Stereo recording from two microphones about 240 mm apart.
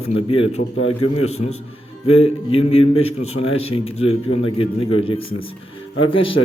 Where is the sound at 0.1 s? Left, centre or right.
Left.